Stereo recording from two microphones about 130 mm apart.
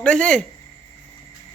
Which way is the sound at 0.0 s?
5° left (ahead or behind).